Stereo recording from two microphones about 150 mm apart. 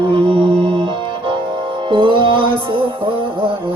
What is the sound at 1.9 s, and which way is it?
Music, 35° right (ahead or behind).